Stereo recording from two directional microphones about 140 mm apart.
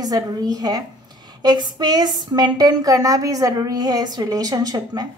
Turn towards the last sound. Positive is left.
turn(degrees=-30)  # may be behind; listen again after turning